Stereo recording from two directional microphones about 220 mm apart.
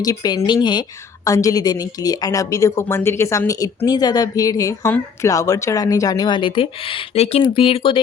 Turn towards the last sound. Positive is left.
turn(degrees=25)  # may be behind; listen again after turning